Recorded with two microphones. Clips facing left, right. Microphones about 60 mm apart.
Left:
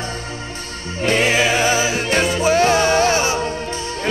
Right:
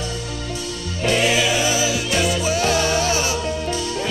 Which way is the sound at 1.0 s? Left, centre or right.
Left.